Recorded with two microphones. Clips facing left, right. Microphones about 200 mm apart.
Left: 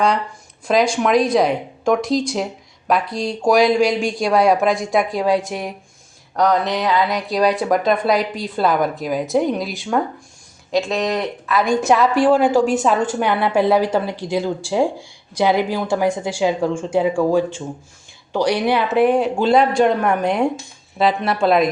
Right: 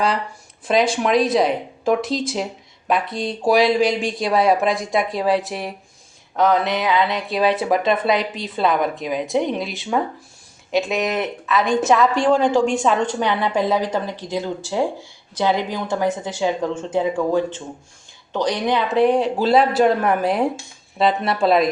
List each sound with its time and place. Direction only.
0.7 s a woman's voice: centre (ahead or behind)